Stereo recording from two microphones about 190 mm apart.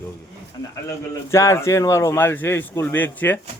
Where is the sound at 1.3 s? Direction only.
15° left (ahead or behind).